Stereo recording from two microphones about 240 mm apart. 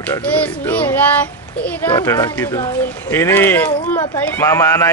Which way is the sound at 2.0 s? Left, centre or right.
Centre.